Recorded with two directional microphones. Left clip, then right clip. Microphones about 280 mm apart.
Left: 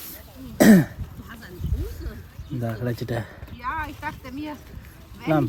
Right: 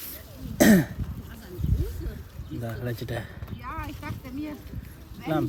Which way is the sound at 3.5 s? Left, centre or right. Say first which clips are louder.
Left 8 dB; left.